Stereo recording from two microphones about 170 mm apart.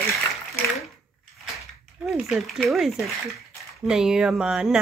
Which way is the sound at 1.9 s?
5° right (ahead or behind).